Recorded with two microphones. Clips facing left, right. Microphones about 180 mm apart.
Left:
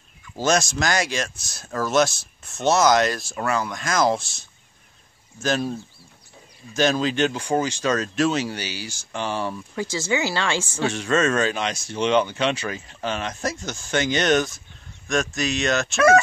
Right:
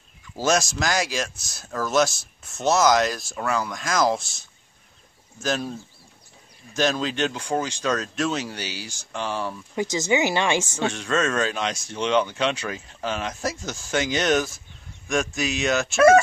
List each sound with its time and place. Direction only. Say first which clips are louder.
0.4 s speech: left 1 dB; 5° right (ahead or behind)
6.7 s speech: left 3 dB; centre (ahead or behind)
9.8 s speech: right 3 dB; 20° right (ahead or behind)
10.8 s speech: left 2 dB; centre (ahead or behind)